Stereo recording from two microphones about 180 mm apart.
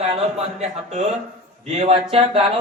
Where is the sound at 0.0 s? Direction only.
35° right (ahead or behind).